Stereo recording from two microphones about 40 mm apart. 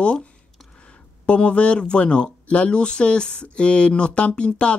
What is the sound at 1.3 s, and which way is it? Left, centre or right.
Speech, left.